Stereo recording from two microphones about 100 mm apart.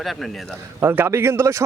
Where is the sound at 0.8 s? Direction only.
20° right (ahead or behind).